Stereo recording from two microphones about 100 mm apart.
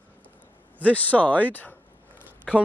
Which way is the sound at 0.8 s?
15° left (ahead or behind).